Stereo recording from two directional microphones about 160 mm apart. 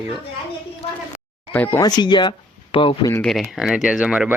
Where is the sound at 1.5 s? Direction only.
10° left (ahead or behind); by 3.1 s 35° left (ahead or behind).